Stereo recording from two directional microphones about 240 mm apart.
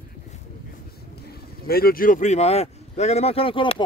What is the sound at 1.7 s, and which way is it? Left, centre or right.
Speech, left.